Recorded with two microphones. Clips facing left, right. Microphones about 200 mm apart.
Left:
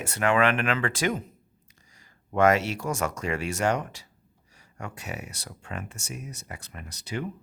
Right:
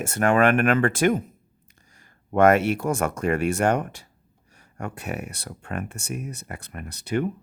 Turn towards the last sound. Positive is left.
turn(degrees=-55)  # may be behind; listen again after turning